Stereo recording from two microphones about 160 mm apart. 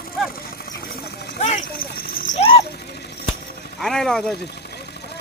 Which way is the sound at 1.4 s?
50° left (ahead or behind).